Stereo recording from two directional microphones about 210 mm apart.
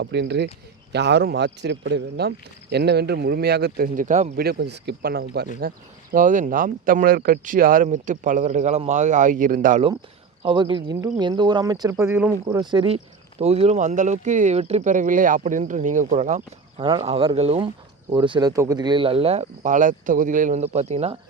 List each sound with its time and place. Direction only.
0.0 s speech: 55° right (ahead or behind); by 4.3 s 35° right (ahead or behind)
4.4 s speech: 50° right (ahead or behind)
10.4 s speech: 25° right (ahead or behind)